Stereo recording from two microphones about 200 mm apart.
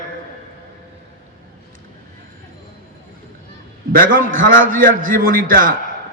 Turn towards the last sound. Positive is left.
turn(degrees=-45)  # may be behind; listen again after turning